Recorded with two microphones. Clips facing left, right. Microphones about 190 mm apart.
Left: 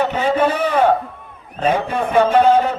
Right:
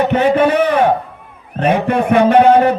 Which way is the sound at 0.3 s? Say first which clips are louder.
Right 4 dB; 65° right (ahead or behind).